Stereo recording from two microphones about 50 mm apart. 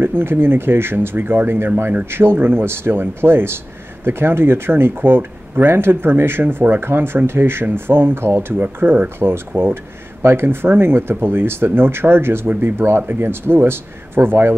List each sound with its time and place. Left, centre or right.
0.0 s speech: right
2.0 s speech: right